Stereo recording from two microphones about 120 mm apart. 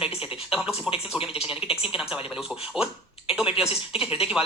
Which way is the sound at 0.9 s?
50° left (ahead or behind).